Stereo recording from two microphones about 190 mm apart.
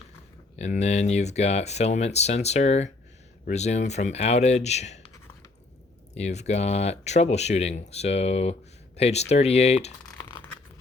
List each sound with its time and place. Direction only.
0.5 s speech: 35° left (ahead or behind)
6.1 s speech: 35° left (ahead or behind)